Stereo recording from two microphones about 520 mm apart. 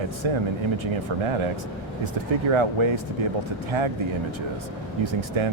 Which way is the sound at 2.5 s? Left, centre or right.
Right.